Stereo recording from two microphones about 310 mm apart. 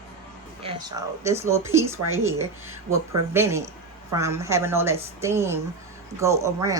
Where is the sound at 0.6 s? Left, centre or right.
Centre.